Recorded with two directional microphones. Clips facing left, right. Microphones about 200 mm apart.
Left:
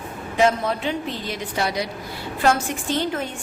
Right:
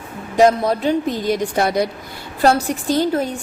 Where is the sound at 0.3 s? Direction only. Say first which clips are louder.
Right 6 dB; 40° right (ahead or behind).